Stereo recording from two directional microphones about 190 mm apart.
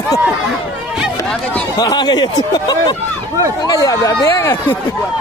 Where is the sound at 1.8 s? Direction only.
20° left (ahead or behind).